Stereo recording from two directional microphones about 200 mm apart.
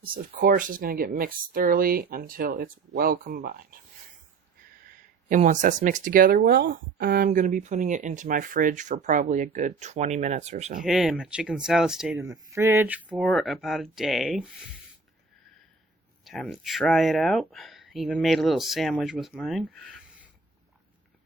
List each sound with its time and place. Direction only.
0.0 s speech: 45° right (ahead or behind)
5.3 s speech: 40° right (ahead or behind)
10.8 s speech: centre (ahead or behind)
12.1 s speech: 15° right (ahead or behind)
16.2 s speech: centre (ahead or behind)